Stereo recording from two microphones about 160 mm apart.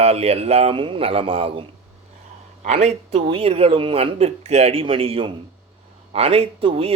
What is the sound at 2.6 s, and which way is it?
A man's voice, 45° right (ahead or behind).